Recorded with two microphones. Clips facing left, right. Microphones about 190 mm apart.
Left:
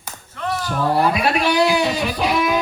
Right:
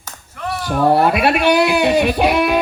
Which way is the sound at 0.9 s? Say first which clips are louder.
Right 3 dB; 65° right (ahead or behind).